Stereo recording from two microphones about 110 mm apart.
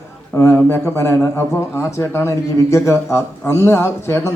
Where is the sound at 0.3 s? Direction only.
20° left (ahead or behind).